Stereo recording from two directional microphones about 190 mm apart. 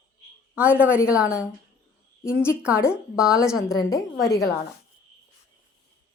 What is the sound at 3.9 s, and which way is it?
Speech, 15° left (ahead or behind).